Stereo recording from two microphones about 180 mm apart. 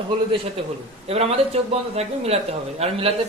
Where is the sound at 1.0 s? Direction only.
35° right (ahead or behind).